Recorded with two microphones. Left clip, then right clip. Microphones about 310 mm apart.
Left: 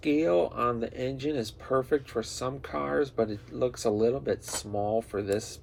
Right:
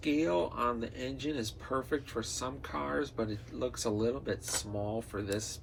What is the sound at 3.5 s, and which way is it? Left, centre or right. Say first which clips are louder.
Speech: left 7 dB; left.